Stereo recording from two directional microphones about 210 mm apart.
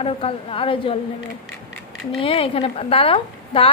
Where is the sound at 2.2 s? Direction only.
25° left (ahead or behind).